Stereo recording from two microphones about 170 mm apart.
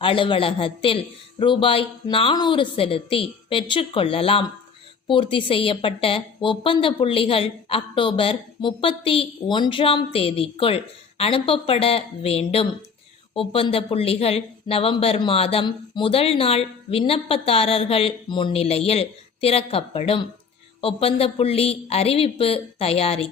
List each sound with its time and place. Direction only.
0.0 s speech: 30° left (ahead or behind)